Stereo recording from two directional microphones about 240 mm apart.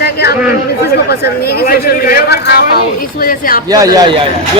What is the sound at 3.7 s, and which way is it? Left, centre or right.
Speech, centre.